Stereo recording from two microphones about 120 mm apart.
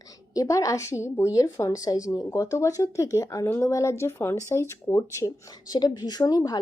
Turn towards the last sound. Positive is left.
turn(degrees=30)  # may be behind; listen again after turning